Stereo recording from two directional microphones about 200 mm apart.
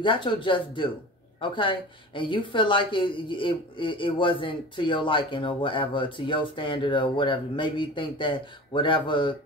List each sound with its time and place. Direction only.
0.0 s a woman's voice: 25° left (ahead or behind)